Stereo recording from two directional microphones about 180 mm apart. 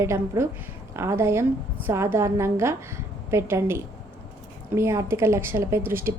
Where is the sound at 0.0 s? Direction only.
15° right (ahead or behind).